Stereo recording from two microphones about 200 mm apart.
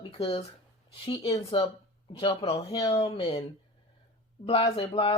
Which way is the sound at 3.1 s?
30° left (ahead or behind).